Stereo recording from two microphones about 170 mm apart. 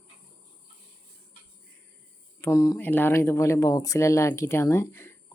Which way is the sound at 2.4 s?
20° left (ahead or behind).